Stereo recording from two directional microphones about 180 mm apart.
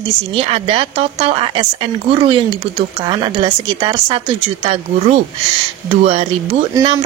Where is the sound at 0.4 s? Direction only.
30° right (ahead or behind).